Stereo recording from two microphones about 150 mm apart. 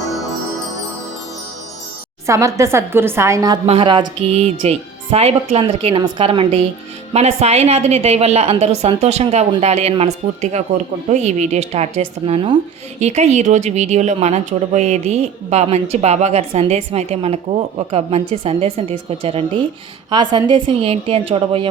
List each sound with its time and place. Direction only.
2.2 s a woman's voice: 20° right (ahead or behind)
3.7 s speech: 35° right (ahead or behind)